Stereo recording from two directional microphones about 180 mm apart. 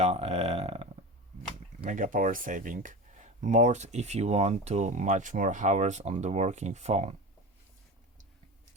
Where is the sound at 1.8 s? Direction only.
45° right (ahead or behind).